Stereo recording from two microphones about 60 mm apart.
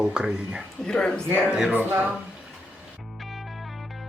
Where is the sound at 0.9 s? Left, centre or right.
Centre.